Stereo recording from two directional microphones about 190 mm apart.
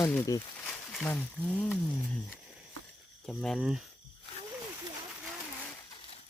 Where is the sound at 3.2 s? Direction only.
Centre (ahead or behind).